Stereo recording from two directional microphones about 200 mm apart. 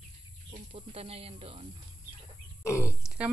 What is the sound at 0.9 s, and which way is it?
Speech, 30° right (ahead or behind).